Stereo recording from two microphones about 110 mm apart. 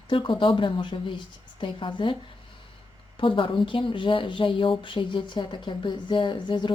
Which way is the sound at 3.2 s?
50° left (ahead or behind).